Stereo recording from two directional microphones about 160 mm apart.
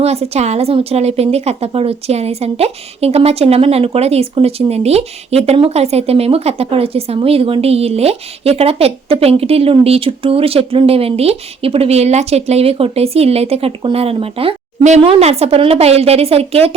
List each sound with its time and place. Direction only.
0.0 s a woman's voice: 40° right (ahead or behind)